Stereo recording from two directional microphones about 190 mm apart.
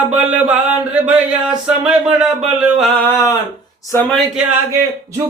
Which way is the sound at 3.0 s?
15° left (ahead or behind).